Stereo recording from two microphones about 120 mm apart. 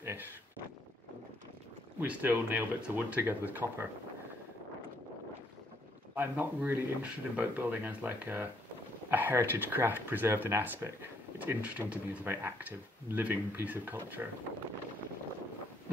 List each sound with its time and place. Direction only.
0.0 s speech: 20° right (ahead or behind)
2.0 s speech: 15° right (ahead or behind)
6.1 s speech: 15° right (ahead or behind)